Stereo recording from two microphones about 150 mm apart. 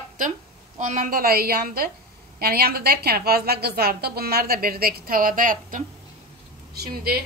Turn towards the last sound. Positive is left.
turn(degrees=-90)